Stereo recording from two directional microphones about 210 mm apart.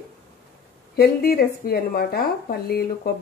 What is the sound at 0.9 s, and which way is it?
A woman's voice, 45° left (ahead or behind).